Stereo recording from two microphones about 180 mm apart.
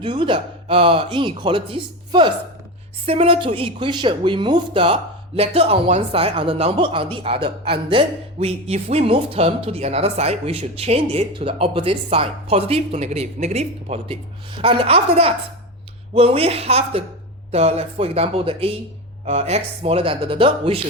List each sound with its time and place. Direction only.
0.0 s speech: 25° right (ahead or behind)